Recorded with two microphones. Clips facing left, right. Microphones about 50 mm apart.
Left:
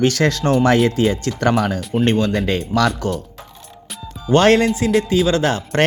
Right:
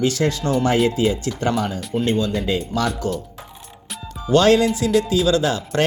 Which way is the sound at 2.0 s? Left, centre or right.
Left.